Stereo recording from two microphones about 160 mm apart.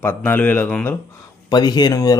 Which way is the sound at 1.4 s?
25° left (ahead or behind).